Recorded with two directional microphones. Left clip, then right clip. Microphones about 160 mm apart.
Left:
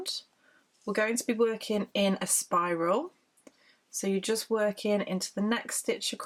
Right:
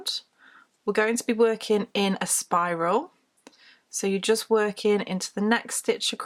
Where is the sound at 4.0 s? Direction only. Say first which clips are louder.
Right 6 dB; 35° right (ahead or behind).